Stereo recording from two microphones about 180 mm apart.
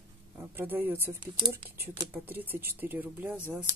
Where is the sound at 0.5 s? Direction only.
10° right (ahead or behind).